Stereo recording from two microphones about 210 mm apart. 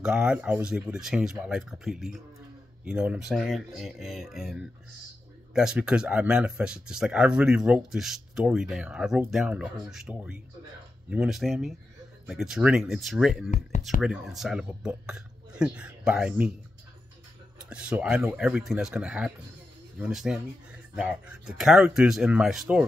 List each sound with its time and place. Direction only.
0.0 s speech: 5° right (ahead or behind)
13.5 s speech: 35° left (ahead or behind)
14.0 s speech: centre (ahead or behind)
17.6 s speech: 5° right (ahead or behind)